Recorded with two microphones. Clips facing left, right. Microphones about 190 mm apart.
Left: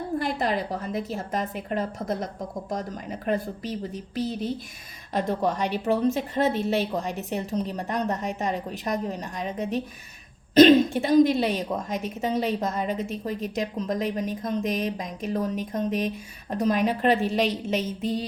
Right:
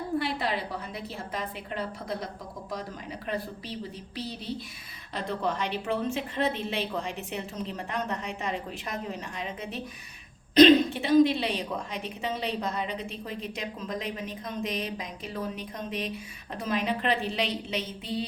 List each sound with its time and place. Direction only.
0.2 s a woman's voice: 45° left (ahead or behind)